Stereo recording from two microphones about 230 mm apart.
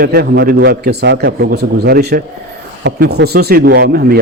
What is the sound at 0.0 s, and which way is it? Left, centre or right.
A man's voice, right.